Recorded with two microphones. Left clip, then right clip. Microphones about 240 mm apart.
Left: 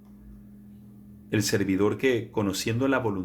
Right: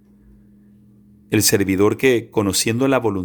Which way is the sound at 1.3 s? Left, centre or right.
Right.